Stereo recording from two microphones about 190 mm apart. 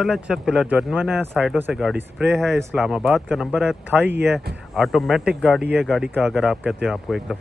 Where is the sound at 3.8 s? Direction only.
10° right (ahead or behind).